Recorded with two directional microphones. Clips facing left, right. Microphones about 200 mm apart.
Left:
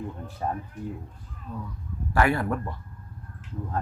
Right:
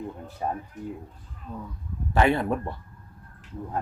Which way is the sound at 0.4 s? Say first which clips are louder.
Even; 15° right (ahead or behind).